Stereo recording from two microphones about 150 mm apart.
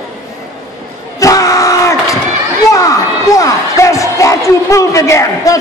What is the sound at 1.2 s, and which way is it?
Crowd, 20° left (ahead or behind).